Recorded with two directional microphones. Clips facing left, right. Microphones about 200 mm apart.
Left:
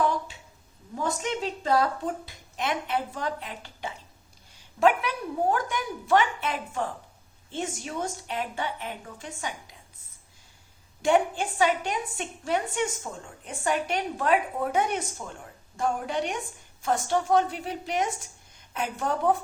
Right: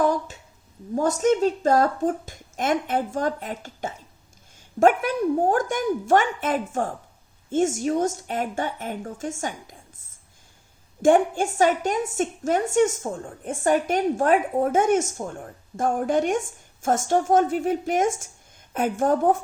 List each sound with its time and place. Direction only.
0.0 s a sound: 45° right (ahead or behind)
0.9 s a woman's voice: 45° right (ahead or behind)
11.0 s a woman's voice: 45° right (ahead or behind)